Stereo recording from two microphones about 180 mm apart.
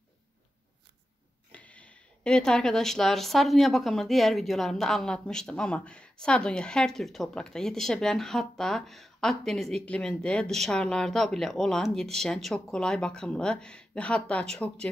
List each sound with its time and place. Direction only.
1.5 s speech: 5° left (ahead or behind)